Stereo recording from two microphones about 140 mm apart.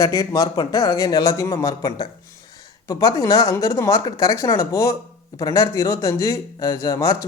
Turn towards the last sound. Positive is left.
turn(degrees=25)  # may be behind; listen again after turning